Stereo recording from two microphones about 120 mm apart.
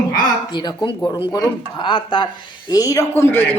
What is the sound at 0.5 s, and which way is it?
Speech, 40° left (ahead or behind).